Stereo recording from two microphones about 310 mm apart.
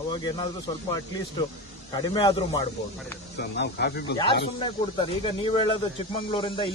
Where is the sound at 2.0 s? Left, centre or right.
Centre.